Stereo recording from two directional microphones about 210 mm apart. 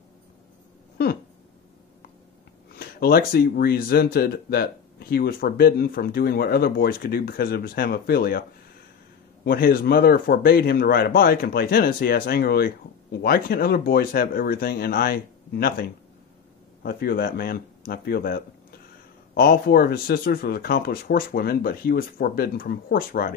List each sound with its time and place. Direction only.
2.7 s speech: 45° left (ahead or behind)